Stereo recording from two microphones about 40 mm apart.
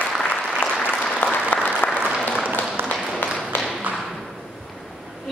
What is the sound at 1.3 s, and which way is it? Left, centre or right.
Applause, left.